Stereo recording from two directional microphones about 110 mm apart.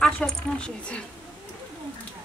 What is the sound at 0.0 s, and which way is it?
Speech, 5° left (ahead or behind).